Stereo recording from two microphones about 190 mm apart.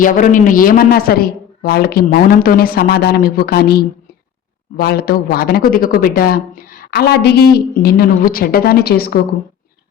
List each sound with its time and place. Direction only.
0.0 s speech: 45° left (ahead or behind)